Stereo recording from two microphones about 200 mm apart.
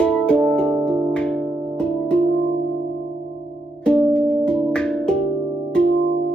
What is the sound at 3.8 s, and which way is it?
Music, 5° left (ahead or behind).